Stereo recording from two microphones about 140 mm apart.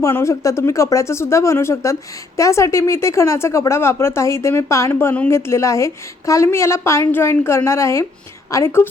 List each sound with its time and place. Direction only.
0.0 s speech: 20° left (ahead or behind)